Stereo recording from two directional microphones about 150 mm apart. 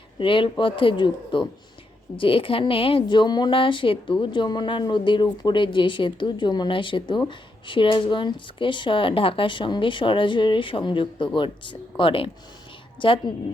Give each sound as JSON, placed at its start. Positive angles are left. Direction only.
{"t": 0.2, "sound": "a woman's voice", "side_deg": 35}